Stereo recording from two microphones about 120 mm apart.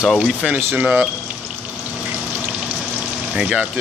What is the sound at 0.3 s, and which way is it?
Speech, 5° right (ahead or behind).